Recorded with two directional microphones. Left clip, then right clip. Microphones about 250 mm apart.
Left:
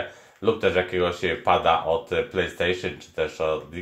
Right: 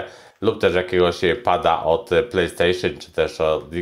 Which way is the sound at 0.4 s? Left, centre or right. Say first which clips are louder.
Right 3 dB; right.